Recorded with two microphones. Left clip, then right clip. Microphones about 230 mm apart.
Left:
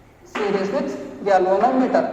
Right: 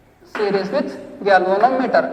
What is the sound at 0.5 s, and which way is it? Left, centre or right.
A man's voice, right.